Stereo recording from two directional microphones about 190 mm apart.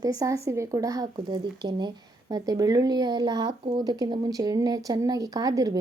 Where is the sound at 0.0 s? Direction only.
20° right (ahead or behind).